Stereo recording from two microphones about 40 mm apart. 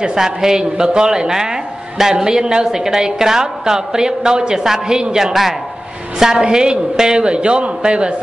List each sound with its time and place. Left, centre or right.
0.0 s speech: centre
5.3 s a man's voice: centre
6.4 s a man's voice: right